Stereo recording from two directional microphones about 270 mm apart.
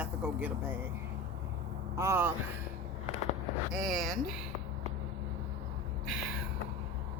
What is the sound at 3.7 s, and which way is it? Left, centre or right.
Speech, centre.